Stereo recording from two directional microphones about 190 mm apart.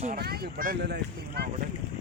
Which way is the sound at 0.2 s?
55° right (ahead or behind).